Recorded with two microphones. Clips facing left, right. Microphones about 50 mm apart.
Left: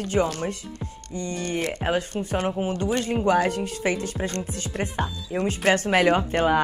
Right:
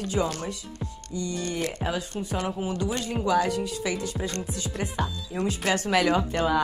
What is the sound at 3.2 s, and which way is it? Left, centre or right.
Speech, left.